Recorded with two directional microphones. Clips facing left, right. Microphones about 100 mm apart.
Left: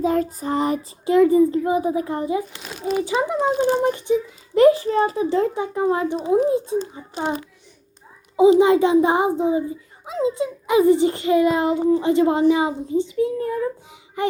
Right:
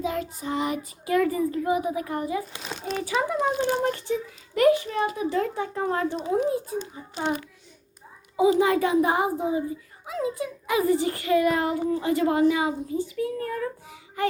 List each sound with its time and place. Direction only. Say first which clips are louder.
0.0 s a child's voice: left 8 dB; 40° left (ahead or behind); by 2.4 s 25° left (ahead or behind)
2.7 s a child's voice: left 8 dB; 5° left (ahead or behind)
3.0 s a child's voice: left 3 dB; 20° left (ahead or behind)
7.2 s a child's voice: left 3 dB; 25° left (ahead or behind)